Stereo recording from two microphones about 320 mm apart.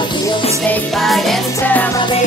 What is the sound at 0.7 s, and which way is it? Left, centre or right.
Music, centre.